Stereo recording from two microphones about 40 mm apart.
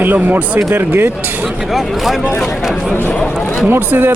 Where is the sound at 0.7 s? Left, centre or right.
Right.